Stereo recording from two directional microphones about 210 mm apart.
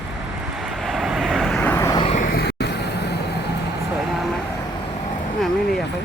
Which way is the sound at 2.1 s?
45° left (ahead or behind).